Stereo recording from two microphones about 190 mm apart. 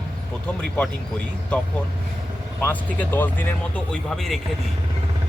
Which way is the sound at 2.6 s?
10° left (ahead or behind).